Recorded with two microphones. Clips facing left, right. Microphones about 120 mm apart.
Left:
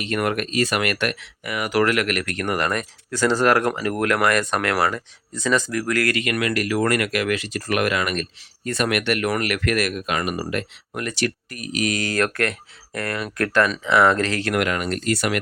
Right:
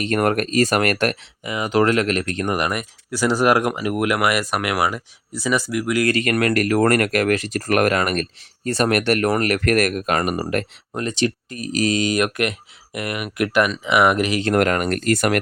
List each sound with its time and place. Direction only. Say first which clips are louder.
0.0 s speech: right 4 dB; 40° right (ahead or behind)
1.2 s speech: right 2 dB; 20° right (ahead or behind)
6.1 s speech: right 4 dB; 40° right (ahead or behind)
10.9 s speech: right 3 dB; 25° right (ahead or behind)
11.9 s speech: right 3 dB; 15° right (ahead or behind)
14.5 s speech: right 4 dB; 45° right (ahead or behind)